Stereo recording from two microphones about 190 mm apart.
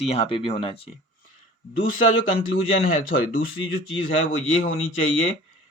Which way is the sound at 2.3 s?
45° left (ahead or behind).